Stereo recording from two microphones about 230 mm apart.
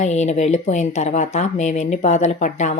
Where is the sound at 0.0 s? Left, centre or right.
Left.